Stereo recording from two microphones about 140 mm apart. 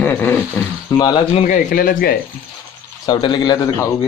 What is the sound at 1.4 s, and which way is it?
Speech, 75° left (ahead or behind).